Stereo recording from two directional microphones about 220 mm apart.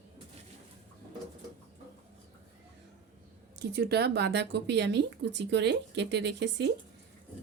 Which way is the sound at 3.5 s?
45° right (ahead or behind).